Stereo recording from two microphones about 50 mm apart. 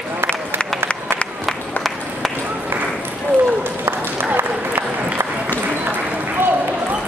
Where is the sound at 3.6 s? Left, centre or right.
Right.